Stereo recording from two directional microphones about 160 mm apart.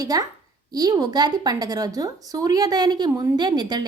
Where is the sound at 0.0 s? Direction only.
25° right (ahead or behind).